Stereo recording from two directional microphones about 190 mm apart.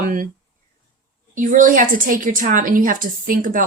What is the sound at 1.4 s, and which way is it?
A woman's voice, 45° right (ahead or behind).